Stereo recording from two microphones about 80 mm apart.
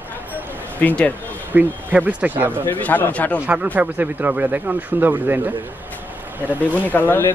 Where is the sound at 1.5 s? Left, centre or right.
Right.